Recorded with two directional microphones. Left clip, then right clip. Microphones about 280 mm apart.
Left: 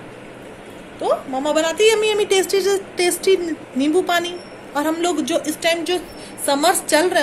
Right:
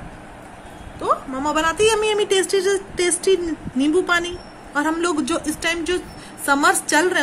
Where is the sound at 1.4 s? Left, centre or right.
Right.